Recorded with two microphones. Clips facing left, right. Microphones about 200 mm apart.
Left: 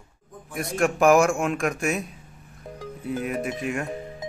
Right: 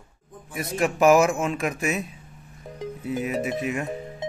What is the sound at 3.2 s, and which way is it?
Speech, centre (ahead or behind).